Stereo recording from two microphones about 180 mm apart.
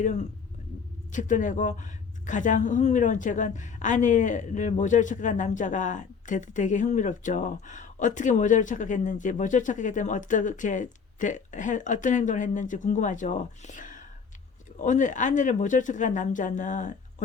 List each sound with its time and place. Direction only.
0.0 s a woman's voice: 40° left (ahead or behind)